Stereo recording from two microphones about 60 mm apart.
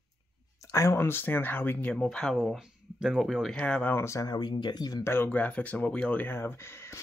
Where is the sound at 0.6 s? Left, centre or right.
Left.